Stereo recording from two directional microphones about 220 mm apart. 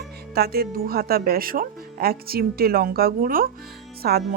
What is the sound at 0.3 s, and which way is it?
Speech, 45° right (ahead or behind).